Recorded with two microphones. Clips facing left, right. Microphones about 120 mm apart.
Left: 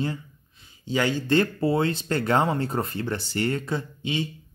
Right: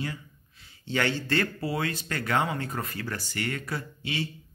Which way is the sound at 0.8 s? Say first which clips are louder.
Left 3 dB; 15° left (ahead or behind).